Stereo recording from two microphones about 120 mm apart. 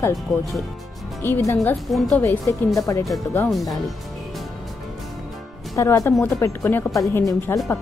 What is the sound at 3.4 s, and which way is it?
Speech, centre (ahead or behind).